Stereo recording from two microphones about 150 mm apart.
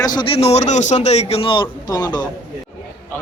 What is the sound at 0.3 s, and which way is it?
A man's voice, 45° left (ahead or behind).